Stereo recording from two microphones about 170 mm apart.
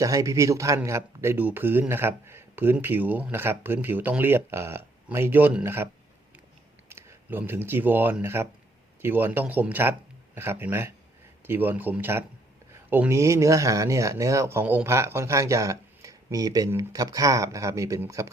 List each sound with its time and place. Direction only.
0.0 s speech: 20° right (ahead or behind)